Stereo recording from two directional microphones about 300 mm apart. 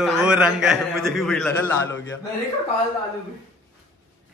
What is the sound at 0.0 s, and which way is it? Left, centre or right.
A man's voice, centre.